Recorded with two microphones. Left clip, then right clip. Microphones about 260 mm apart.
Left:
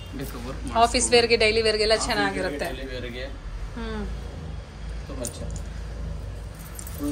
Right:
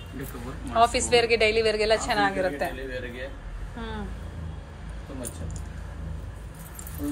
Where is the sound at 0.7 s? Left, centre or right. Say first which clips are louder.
Left 1 dB; centre.